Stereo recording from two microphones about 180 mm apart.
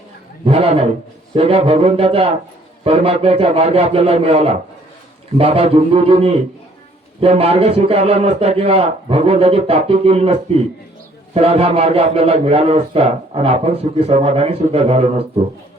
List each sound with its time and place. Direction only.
0.4 s a man's voice: 35° right (ahead or behind)